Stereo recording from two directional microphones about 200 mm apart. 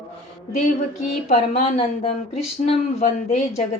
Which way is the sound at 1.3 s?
30° left (ahead or behind).